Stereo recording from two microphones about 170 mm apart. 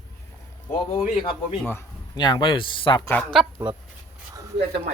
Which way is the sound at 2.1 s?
25° left (ahead or behind).